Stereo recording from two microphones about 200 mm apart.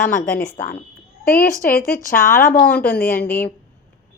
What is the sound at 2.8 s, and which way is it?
Speech, 50° left (ahead or behind).